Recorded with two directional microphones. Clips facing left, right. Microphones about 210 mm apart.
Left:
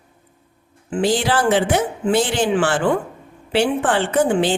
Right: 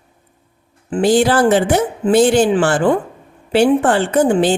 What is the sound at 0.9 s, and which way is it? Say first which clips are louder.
A woman's voice: right 6 dB; 45° right (ahead or behind).